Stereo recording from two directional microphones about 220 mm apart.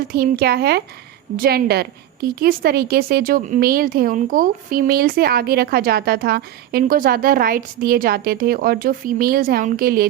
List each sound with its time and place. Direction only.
0.1 s a woman's voice: 45° right (ahead or behind)